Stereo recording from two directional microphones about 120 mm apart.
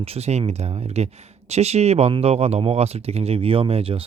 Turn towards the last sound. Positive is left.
turn(degrees=-50)  # may be behind; listen again after turning